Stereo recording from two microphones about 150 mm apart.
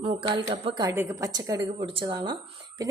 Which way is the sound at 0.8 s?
25° right (ahead or behind).